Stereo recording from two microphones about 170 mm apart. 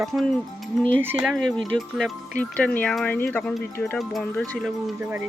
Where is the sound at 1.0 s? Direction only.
10° right (ahead or behind).